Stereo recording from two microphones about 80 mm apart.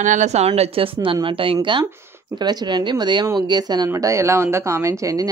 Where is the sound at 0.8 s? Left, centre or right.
Right.